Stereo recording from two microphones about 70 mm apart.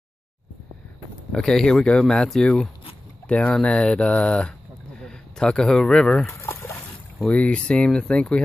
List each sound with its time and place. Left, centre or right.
1.3 s speech: centre
6.7 s speech: left